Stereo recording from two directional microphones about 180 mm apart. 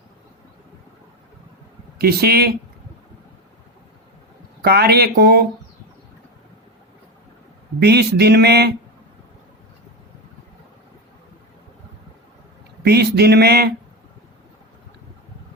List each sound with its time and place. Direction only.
2.0 s speech: 60° right (ahead or behind)
4.6 s speech: 60° right (ahead or behind)
7.8 s speech: 65° right (ahead or behind)
12.8 s speech: 65° right (ahead or behind)